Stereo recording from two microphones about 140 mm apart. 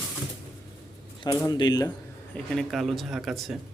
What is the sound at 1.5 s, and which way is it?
Speech, 30° left (ahead or behind).